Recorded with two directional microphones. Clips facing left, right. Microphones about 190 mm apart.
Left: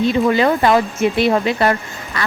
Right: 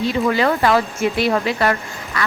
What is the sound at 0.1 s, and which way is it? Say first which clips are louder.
Speech: left 3 dB; 20° left (ahead or behind).